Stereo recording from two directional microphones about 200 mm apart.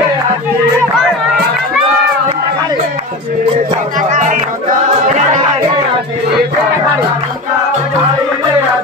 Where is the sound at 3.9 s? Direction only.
40° right (ahead or behind).